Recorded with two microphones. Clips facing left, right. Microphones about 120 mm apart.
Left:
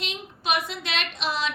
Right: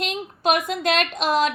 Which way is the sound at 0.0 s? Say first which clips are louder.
Right 8 dB; 45° right (ahead or behind).